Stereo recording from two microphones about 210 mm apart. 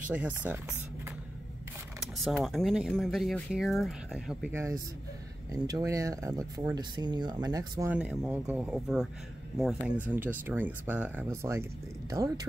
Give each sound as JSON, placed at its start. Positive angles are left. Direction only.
{"t": 0.1, "sound": "speech", "side_deg": -5}
{"t": 2.1, "sound": "speech", "side_deg": 0}
{"t": 7.9, "sound": "speech", "side_deg": -5}